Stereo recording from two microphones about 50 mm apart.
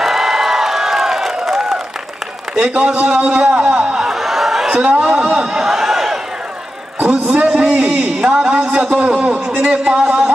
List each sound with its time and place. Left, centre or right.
0.0 s crowd: centre
2.5 s a man's voice: right
4.1 s a sound: centre
4.7 s a man's voice: right
5.5 s a sound: centre
7.0 s a man's voice: right